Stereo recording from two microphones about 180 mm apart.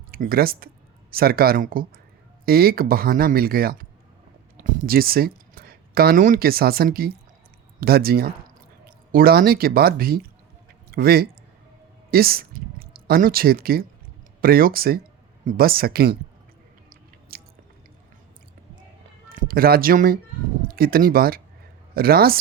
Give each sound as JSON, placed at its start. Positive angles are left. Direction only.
{"t": 0.1, "sound": "speech", "side_deg": -55}
{"t": 16.9, "sound": "chewing", "side_deg": -55}
{"t": 19.3, "sound": "speech", "side_deg": -55}